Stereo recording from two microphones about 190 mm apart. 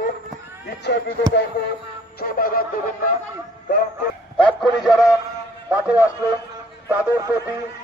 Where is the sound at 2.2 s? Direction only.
50° left (ahead or behind).